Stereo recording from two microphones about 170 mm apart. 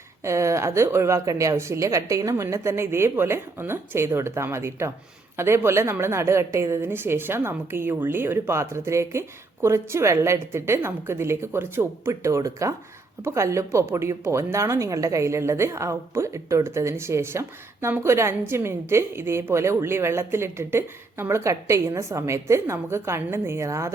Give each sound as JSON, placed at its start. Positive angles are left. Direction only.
{"t": 0.3, "sound": "speech", "side_deg": -15}